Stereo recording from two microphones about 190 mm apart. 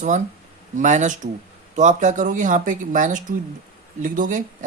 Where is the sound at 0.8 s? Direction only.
40° right (ahead or behind).